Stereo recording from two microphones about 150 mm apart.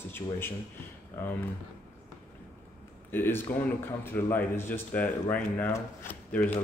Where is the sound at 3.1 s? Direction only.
15° left (ahead or behind).